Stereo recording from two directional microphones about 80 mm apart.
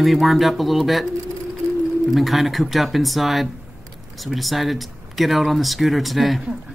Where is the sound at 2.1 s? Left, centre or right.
Centre.